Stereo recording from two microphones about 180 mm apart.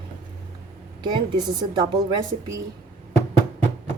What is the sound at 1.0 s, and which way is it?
A woman's voice, 25° right (ahead or behind).